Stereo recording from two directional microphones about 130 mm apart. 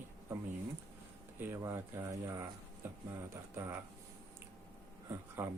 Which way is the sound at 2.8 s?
20° right (ahead or behind).